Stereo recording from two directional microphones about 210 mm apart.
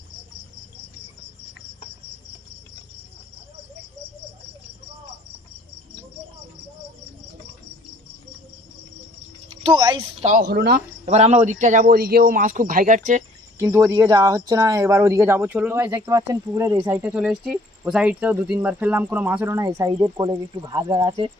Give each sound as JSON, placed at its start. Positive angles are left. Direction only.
{"t": 9.6, "sound": "speech", "side_deg": -20}
{"t": 10.4, "sound": "speech", "side_deg": -50}
{"t": 11.0, "sound": "speech", "side_deg": -30}
{"t": 13.6, "sound": "speech", "side_deg": -15}